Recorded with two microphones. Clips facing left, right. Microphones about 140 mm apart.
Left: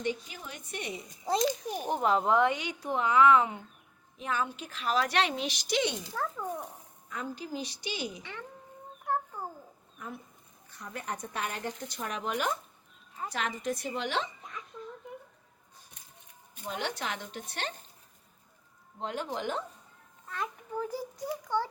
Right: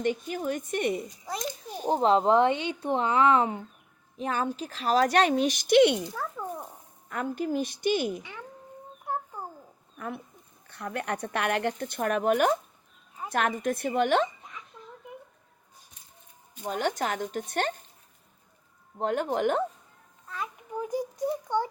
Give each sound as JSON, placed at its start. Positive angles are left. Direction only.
{"t": 0.0, "sound": "a woman's voice", "side_deg": -50}
{"t": 1.6, "sound": "speech", "side_deg": 15}
{"t": 1.9, "sound": "a woman's voice", "side_deg": -30}
{"t": 6.1, "sound": "a sound", "side_deg": -5}
{"t": 7.1, "sound": "a woman's voice", "side_deg": -55}
{"t": 8.2, "sound": "speech", "side_deg": -10}
{"t": 10.7, "sound": "a woman's voice", "side_deg": -65}
{"t": 16.6, "sound": "a woman's voice", "side_deg": -45}
{"t": 18.9, "sound": "a woman's voice", "side_deg": -50}
{"t": 20.2, "sound": "a child's voice", "side_deg": 0}
{"t": 20.7, "sound": "a child's voice", "side_deg": -15}